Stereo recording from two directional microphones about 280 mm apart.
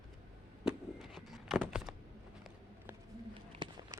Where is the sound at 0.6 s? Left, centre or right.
Centre.